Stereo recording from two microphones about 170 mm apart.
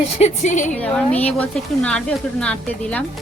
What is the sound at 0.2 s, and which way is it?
Speech, 45° left (ahead or behind).